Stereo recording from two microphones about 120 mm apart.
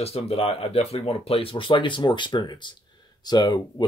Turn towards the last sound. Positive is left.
turn(degrees=35)  # may be behind; listen again after turning